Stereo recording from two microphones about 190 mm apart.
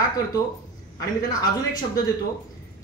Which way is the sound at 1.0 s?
20° left (ahead or behind).